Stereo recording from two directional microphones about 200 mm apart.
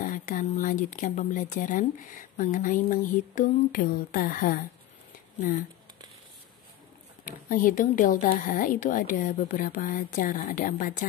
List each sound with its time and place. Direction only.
0.0 s speech: 40° left (ahead or behind)
7.4 s speech: 40° left (ahead or behind)